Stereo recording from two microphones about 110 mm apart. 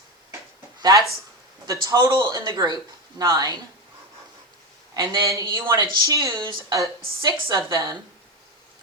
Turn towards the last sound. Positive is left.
turn(degrees=-30)  # may be behind; listen again after turning